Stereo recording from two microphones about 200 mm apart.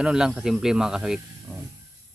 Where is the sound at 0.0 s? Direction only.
5° right (ahead or behind).